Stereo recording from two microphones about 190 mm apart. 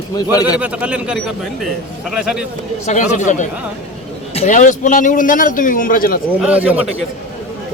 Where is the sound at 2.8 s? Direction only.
40° left (ahead or behind).